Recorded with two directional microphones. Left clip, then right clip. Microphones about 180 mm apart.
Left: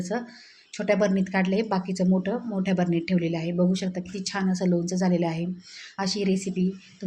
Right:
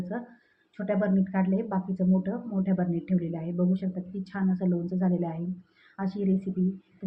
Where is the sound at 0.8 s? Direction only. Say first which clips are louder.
Left 5 dB; 30° left (ahead or behind).